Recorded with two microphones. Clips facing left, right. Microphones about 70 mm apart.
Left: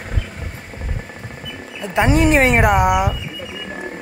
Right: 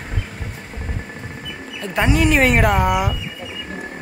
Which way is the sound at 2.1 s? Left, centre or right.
Left.